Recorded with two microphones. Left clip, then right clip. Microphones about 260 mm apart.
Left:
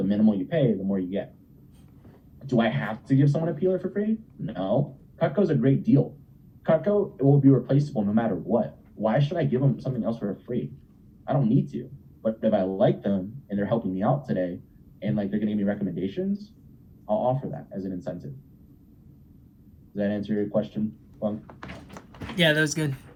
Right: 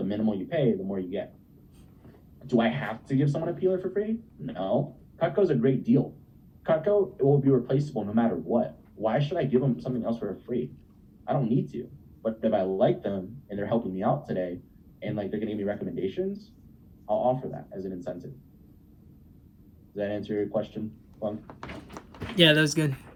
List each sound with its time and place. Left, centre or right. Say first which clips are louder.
0.0 s speech: left 5 dB; left
2.5 s speech: left 1 dB; left
20.0 s speech: left 1 dB; left